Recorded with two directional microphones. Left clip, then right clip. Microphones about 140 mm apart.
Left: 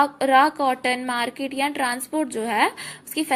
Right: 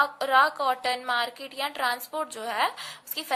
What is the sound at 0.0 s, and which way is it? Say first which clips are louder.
A woman's voice: left 4 dB; 20° left (ahead or behind).